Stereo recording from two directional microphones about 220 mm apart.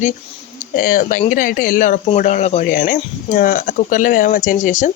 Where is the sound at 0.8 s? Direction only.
40° left (ahead or behind).